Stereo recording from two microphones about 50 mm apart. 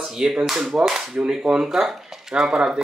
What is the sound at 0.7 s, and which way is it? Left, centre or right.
Cap gun, centre.